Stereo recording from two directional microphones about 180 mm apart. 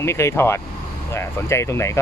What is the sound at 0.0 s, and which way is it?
Speech, 15° left (ahead or behind).